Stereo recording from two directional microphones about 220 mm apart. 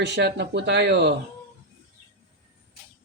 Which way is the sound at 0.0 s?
50° right (ahead or behind).